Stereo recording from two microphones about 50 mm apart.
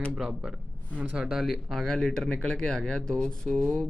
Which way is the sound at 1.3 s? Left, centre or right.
Centre.